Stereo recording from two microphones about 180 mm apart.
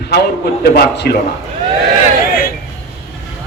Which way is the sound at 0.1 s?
65° left (ahead or behind).